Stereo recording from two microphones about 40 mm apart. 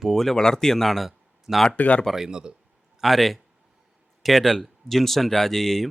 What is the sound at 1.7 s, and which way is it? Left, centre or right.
Speech, left.